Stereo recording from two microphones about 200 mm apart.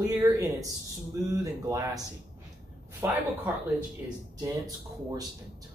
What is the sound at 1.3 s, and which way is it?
Speech, 15° right (ahead or behind).